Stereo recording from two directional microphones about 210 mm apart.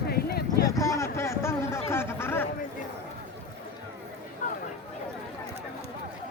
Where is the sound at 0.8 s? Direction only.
15° left (ahead or behind).